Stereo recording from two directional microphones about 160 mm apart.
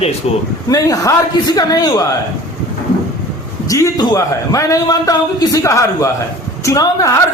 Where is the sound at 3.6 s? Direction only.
20° left (ahead or behind).